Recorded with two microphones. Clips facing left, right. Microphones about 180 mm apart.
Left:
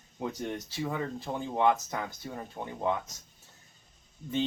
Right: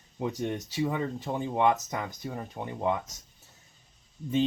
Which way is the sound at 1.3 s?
15° right (ahead or behind).